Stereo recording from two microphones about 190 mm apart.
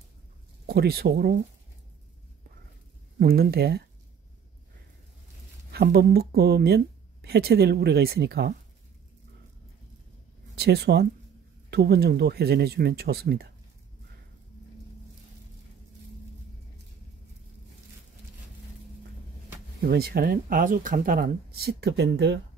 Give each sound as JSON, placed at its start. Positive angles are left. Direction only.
{"t": 0.7, "sound": "speech", "side_deg": -55}
{"t": 3.2, "sound": "speech", "side_deg": -55}
{"t": 5.7, "sound": "speech", "side_deg": -55}
{"t": 10.5, "sound": "speech", "side_deg": -60}
{"t": 19.8, "sound": "speech", "side_deg": -55}